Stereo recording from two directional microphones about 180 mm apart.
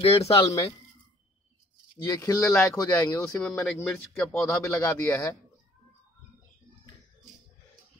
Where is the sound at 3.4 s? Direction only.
5° left (ahead or behind).